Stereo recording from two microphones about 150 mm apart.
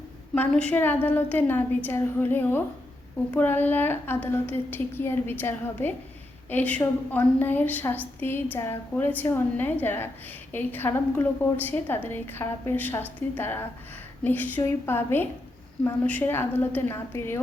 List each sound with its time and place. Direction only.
0.3 s a woman's voice: 10° left (ahead or behind)